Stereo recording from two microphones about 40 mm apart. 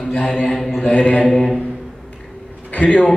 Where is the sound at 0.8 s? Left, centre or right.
Left.